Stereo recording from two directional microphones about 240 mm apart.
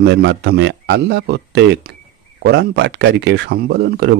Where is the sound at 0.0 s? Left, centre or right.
Right.